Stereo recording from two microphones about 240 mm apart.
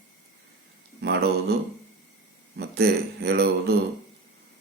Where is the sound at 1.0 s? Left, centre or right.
Right.